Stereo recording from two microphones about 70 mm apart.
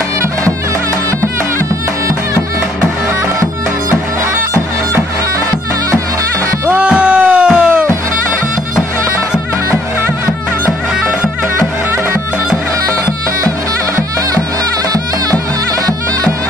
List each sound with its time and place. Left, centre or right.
6.7 s a sound: centre
7.4 s music: centre
7.7 s music: right